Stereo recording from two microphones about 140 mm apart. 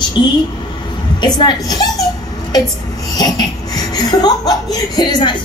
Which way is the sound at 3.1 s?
30° left (ahead or behind).